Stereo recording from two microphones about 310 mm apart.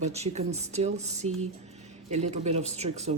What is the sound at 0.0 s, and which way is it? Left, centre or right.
Speech, right.